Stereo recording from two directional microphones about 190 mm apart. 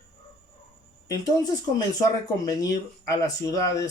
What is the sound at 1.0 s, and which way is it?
Speech, 20° left (ahead or behind).